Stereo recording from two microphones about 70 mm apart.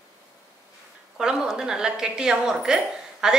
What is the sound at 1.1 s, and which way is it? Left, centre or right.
A woman's voice, centre.